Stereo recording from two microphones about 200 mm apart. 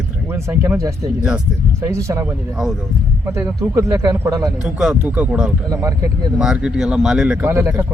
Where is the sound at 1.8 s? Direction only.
15° right (ahead or behind).